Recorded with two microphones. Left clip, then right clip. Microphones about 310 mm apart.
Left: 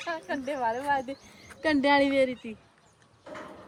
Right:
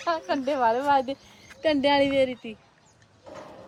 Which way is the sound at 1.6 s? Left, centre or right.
Centre.